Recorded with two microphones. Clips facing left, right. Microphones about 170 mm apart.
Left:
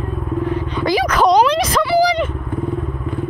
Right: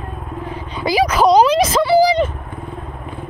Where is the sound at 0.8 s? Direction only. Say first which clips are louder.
Right 1 dB; 10° right (ahead or behind).